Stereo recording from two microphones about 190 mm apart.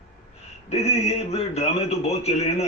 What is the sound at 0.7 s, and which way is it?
A man's voice, 35° left (ahead or behind).